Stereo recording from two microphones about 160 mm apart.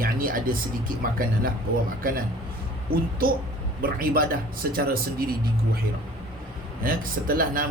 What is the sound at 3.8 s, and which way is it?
A man's voice, 65° right (ahead or behind).